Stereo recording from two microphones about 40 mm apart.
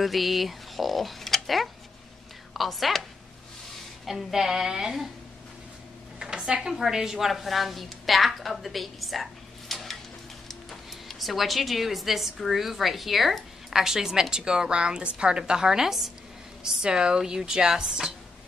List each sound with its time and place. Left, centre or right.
0.0 s a woman's voice: centre
6.1 s a sound: centre
6.6 s a woman's voice: centre